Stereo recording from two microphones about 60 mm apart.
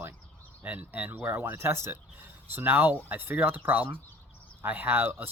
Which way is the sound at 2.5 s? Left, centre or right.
Right.